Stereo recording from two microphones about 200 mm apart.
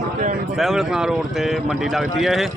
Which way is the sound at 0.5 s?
Centre (ahead or behind).